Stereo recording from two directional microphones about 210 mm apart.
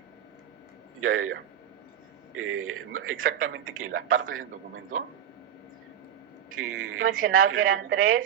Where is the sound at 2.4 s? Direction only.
85° right.